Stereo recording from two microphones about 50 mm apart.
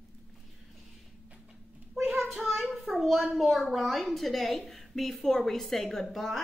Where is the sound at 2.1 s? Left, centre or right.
Centre.